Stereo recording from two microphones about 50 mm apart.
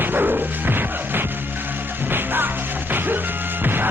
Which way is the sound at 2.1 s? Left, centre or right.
Right.